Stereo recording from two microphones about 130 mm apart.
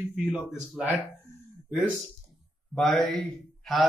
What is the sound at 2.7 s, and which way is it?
A man's voice, 5° left (ahead or behind).